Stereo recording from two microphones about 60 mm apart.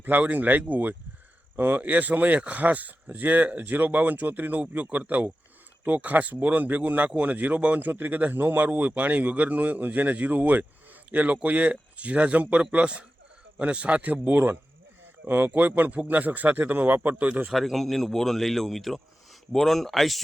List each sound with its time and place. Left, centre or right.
0.0 s speech: right
17.4 s speech: centre